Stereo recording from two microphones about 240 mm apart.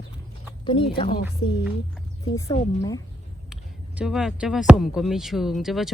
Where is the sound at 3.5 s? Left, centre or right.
Centre.